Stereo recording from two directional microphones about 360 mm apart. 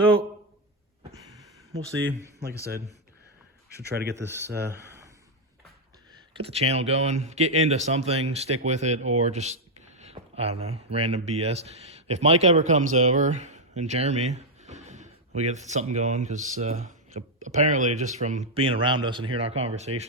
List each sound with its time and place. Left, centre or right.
3.8 s speech: right
4.1 s speech: centre
4.5 s speech: right
6.3 s speech: centre